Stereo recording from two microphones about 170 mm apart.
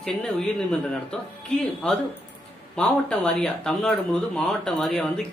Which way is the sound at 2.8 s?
5° left (ahead or behind).